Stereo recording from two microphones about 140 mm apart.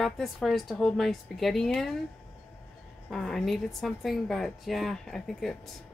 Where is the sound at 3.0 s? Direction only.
5° left (ahead or behind).